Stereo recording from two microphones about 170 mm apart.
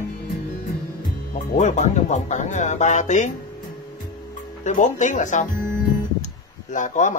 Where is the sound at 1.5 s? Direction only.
45° left (ahead or behind).